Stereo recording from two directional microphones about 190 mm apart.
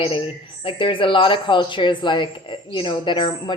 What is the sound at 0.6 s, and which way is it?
Speech, 25° left (ahead or behind).